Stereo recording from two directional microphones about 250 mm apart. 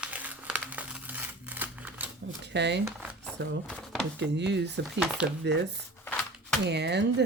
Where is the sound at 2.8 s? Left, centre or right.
Centre.